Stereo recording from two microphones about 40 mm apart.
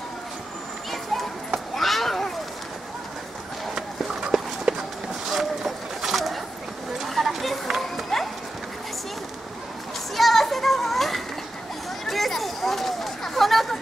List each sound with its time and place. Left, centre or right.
1.8 s children playing: centre
4.2 s run: centre
5.3 s a sound: centre
8.1 s dog: centre
10.1 s children playing: centre
12.1 s a sound: centre